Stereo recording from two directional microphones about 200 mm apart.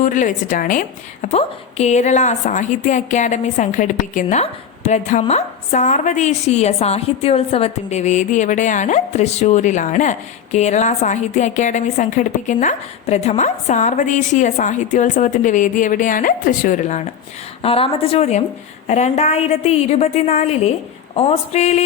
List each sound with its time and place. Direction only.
0.0 s a woman's voice: 40° left (ahead or behind)